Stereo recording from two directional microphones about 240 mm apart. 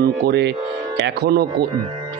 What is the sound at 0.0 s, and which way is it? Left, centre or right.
A man's voice, right.